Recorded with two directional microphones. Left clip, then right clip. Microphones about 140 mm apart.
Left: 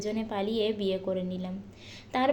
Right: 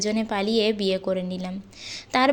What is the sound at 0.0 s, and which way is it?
A woman's voice, 30° right (ahead or behind).